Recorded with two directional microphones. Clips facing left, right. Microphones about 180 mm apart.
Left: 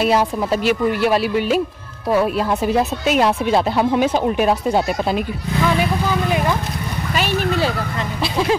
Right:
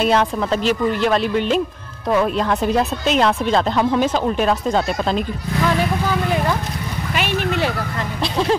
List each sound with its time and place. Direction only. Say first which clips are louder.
0.0 s speech: even; 5° left (ahead or behind)
7.2 s speech: left 1 dB; 40° left (ahead or behind)
8.2 s speech: even; 10° left (ahead or behind)